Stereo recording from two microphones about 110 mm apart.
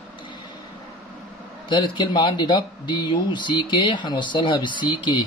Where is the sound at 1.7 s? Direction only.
45° left (ahead or behind).